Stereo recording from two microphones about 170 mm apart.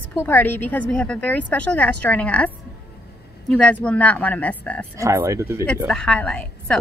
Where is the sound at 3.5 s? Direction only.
5° left (ahead or behind).